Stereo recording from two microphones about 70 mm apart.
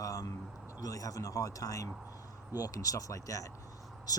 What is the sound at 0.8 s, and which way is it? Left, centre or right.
Speech, left.